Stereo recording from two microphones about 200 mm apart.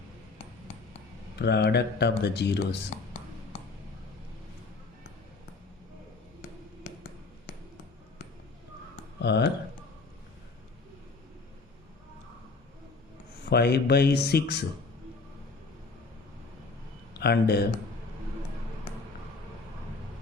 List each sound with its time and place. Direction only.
1.4 s speech: 55° left (ahead or behind)
9.2 s speech: 60° left (ahead or behind)
13.5 s speech: 55° left (ahead or behind)
17.2 s speech: 55° left (ahead or behind)